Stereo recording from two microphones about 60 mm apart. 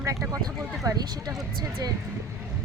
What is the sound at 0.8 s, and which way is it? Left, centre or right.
Speech, right.